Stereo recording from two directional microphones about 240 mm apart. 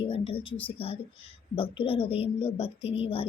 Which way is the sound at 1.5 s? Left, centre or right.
Left.